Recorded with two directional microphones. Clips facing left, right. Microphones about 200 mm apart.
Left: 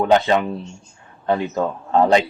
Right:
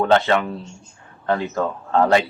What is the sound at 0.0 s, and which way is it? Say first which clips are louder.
Speech: left 1 dB; 15° left (ahead or behind).